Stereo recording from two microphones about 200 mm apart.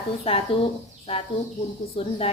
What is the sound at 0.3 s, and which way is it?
Speech, 30° left (ahead or behind).